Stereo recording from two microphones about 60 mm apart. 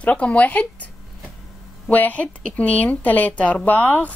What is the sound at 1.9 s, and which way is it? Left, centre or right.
A woman's voice, left.